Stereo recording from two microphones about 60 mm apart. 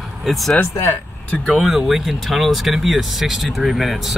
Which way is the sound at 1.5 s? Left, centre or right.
Centre.